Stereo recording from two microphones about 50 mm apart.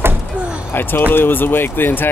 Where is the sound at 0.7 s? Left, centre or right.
Left.